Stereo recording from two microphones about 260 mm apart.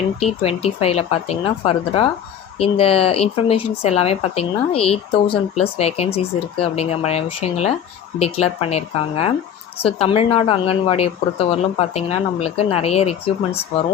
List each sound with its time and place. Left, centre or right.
0.2 s speech: left